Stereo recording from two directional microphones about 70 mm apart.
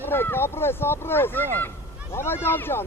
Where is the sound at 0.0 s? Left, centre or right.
Left.